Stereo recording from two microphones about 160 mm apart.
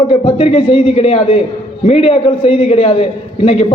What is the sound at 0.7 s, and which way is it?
Speech, 50° left (ahead or behind).